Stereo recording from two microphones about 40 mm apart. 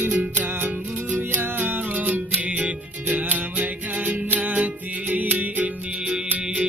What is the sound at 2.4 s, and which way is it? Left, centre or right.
Music, right.